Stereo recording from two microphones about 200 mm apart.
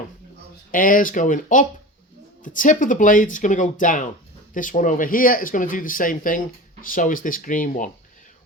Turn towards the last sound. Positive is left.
turn(degrees=40)  # may be behind; listen again after turning